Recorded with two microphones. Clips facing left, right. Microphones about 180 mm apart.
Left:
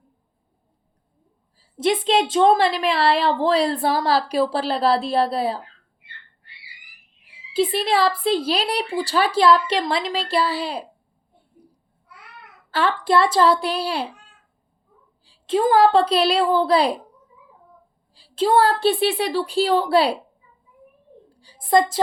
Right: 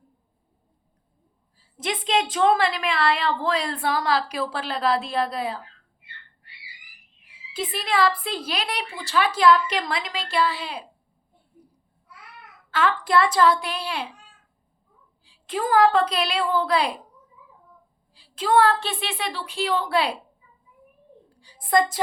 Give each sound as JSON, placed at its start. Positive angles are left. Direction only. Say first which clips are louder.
{"t": 1.5, "sound": "a woman's voice", "louder": "left 9 dB", "side_deg": 30}
{"t": 7.3, "sound": "a woman's voice", "louder": "left 10 dB", "side_deg": 30}
{"t": 12.7, "sound": "a woman's voice", "louder": "left 2 dB", "side_deg": 30}
{"t": 15.2, "sound": "a woman's voice", "louder": "left 8 dB", "side_deg": 30}
{"t": 18.1, "sound": "a woman's voice", "louder": "left 3 dB", "side_deg": 30}
{"t": 21.4, "sound": "a woman's voice", "louder": "left 3 dB", "side_deg": 30}